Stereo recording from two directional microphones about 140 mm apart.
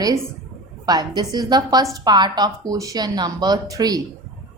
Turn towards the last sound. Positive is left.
turn(degrees=-25)  # may be behind; listen again after turning